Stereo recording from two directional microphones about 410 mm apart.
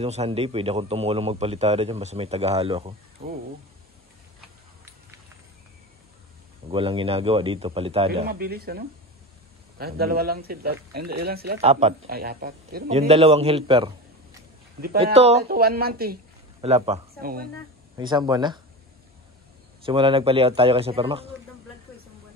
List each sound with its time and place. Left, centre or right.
0.0 s a man's voice: centre
6.7 s a man's voice: centre
17.9 s a man's voice: centre
19.8 s a man's voice: centre